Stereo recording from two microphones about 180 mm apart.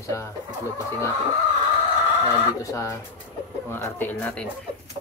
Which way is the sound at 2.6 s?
15° left (ahead or behind).